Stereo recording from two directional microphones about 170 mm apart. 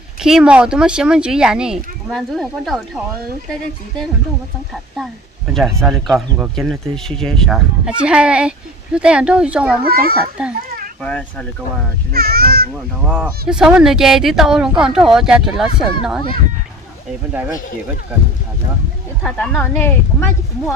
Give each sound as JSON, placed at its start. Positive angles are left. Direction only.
{"t": 0.2, "sound": "speech", "side_deg": -5}
{"t": 5.5, "sound": "speech", "side_deg": 0}
{"t": 9.8, "sound": "a child's voice", "side_deg": -60}
{"t": 10.4, "sound": "a child's voice", "side_deg": -5}
{"t": 11.0, "sound": "speech", "side_deg": 5}
{"t": 12.1, "sound": "a child's voice", "side_deg": -65}
{"t": 13.0, "sound": "speech", "side_deg": -5}
{"t": 19.2, "sound": "speech", "side_deg": 10}